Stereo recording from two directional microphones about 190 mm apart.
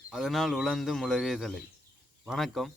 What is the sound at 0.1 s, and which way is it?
Speech, centre (ahead or behind).